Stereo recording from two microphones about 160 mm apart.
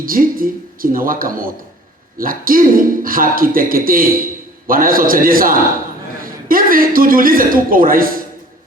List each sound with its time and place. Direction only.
0.0 s a man's voice: 60° right (ahead or behind)